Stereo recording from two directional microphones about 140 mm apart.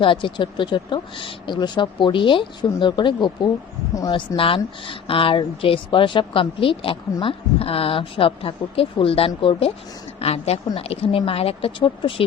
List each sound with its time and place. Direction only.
0.0 s speech: 35° left (ahead or behind)